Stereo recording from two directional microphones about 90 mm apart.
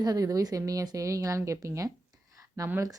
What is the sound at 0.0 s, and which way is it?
Speech, 45° right (ahead or behind).